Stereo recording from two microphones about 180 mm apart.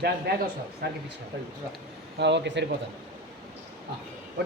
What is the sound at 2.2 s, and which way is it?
Speech, 75° right (ahead or behind).